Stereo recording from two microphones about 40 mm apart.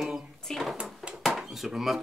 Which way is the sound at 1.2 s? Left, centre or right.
Centre.